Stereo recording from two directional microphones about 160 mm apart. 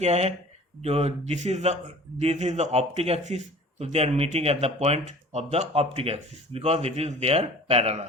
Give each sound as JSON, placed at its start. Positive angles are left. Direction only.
{"t": 0.0, "sound": "a man's voice", "side_deg": -40}